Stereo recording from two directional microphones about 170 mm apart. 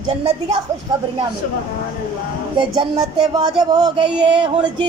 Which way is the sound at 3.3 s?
25° right (ahead or behind).